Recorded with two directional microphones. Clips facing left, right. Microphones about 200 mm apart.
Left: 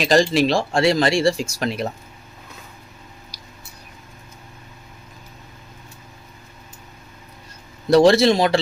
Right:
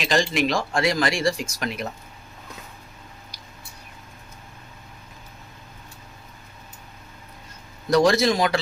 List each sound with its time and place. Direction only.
0.0 s speech: 35° left (ahead or behind)
3.3 s a sound: 35° left (ahead or behind)
7.9 s speech: 30° left (ahead or behind)